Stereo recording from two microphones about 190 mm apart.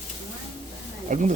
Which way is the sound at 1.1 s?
40° right (ahead or behind).